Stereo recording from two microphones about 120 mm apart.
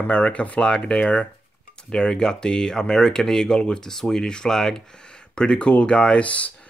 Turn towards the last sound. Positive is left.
turn(degrees=10)  # may be behind; listen again after turning